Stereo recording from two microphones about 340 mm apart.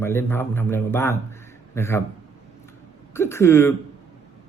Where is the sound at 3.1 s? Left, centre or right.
Centre.